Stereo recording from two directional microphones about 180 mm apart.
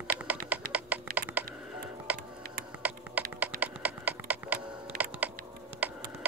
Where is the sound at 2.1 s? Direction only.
55° right (ahead or behind).